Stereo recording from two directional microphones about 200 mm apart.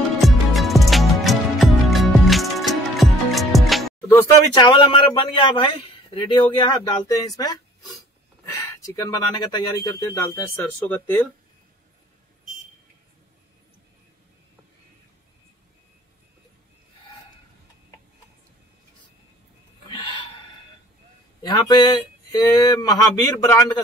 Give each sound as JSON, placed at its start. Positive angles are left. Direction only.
{"t": 0.2, "sound": "music", "side_deg": 0}
{"t": 4.1, "sound": "speech", "side_deg": 25}
{"t": 21.4, "sound": "speech", "side_deg": 20}